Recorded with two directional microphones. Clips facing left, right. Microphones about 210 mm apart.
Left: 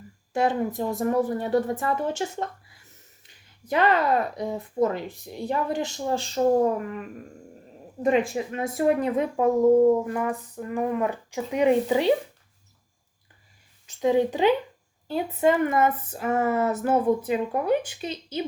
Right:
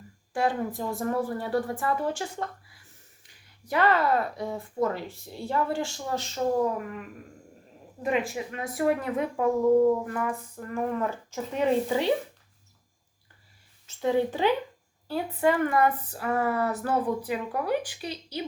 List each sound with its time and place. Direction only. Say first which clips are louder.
0.3 s speech: left 3 dB; 20° left (ahead or behind)
3.2 s speech: left 5 dB; 20° left (ahead or behind)
8.1 s speech: left 3 dB; 25° left (ahead or behind)
13.8 s a woman's voice: left 3 dB; 15° left (ahead or behind)